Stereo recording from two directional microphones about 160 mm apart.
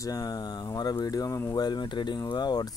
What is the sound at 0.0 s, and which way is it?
Speech, 20° left (ahead or behind).